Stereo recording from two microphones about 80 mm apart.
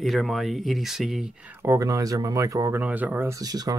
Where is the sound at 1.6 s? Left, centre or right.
Right.